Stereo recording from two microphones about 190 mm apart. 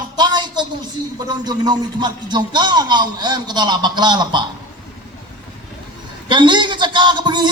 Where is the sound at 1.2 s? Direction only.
20° right (ahead or behind).